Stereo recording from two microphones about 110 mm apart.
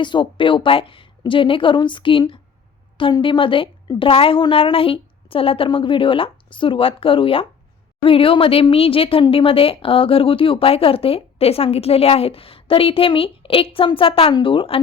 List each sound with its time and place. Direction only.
0.0 s a woman's voice: 45° left (ahead or behind)